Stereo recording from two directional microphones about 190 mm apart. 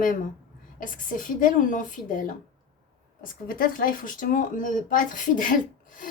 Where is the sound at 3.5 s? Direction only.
50° left (ahead or behind).